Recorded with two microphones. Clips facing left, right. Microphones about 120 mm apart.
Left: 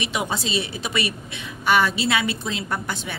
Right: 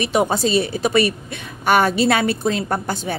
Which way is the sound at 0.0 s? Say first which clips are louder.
Right 8 dB; 45° right (ahead or behind).